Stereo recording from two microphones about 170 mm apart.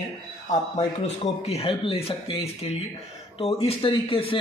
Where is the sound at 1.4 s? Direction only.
35° left (ahead or behind).